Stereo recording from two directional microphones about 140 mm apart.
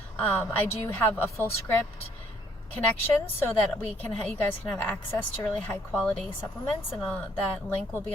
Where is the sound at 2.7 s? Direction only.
15° left (ahead or behind).